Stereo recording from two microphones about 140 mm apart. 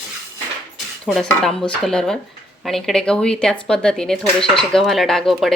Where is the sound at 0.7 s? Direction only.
Centre (ahead or behind).